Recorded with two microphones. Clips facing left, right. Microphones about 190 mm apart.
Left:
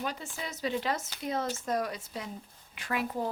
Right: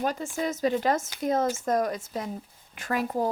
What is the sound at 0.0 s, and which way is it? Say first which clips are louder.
Speech: right 9 dB; 45° right (ahead or behind).